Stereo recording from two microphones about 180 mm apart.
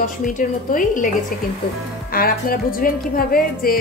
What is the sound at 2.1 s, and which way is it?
Speech, 55° left (ahead or behind).